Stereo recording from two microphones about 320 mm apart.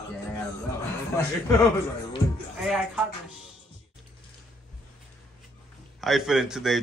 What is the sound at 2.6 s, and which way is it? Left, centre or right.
Speech, centre.